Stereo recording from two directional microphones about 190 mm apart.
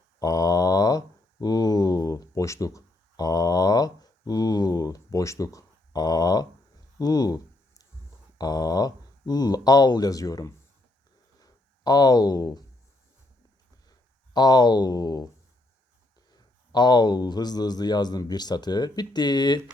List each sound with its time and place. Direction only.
0.2 s mantra: 20° left (ahead or behind)
7.0 s a sound: 20° left (ahead or behind)
8.4 s speech: 20° left (ahead or behind)
11.3 s a sound: 20° left (ahead or behind)
14.3 s speech: 20° left (ahead or behind)
16.3 s speech: 20° left (ahead or behind)